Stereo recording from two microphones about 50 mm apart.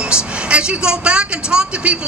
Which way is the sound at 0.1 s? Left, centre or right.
Right.